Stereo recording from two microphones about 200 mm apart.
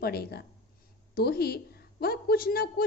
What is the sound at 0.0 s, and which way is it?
A woman's voice, 50° left (ahead or behind).